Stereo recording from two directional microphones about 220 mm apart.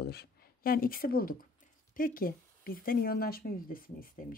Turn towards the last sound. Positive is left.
turn(degrees=40)  # may be behind; listen again after turning